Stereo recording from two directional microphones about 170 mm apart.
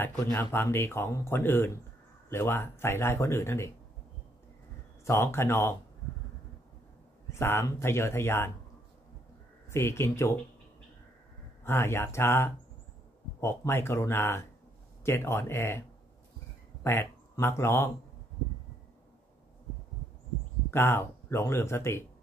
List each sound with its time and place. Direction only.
0.0 s speech: 15° left (ahead or behind)
5.0 s speech: 15° left (ahead or behind)
7.3 s speech: 15° left (ahead or behind)
9.7 s speech: 15° left (ahead or behind)
11.6 s speech: 15° left (ahead or behind)
16.8 s speech: 15° left (ahead or behind)
20.7 s speech: 15° left (ahead or behind)